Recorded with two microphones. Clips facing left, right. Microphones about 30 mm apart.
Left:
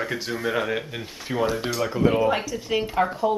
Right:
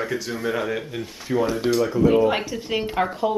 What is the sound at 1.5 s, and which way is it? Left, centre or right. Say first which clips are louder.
Speech: right 5 dB; centre.